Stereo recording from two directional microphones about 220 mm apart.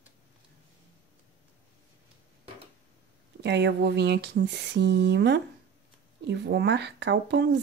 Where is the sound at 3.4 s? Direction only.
50° right (ahead or behind).